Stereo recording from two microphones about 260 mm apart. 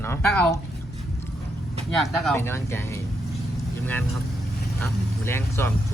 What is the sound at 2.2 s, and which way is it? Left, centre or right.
Speech, centre.